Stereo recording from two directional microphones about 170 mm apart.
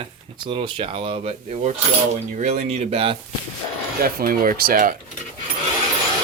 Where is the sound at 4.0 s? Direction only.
60° right (ahead or behind).